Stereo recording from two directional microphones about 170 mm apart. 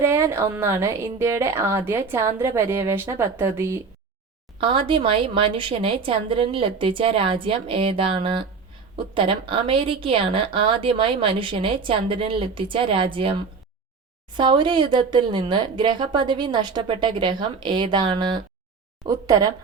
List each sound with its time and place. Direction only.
0.0 s a woman's voice: 15° right (ahead or behind)
4.5 s a woman's voice: 30° right (ahead or behind)